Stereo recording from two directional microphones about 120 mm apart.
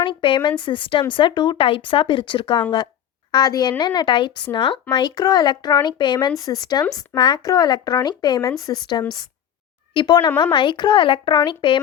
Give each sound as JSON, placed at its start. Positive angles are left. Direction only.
{"t": 0.0, "sound": "speech", "side_deg": 45}